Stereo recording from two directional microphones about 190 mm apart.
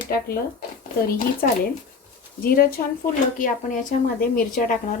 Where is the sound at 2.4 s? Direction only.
50° left (ahead or behind).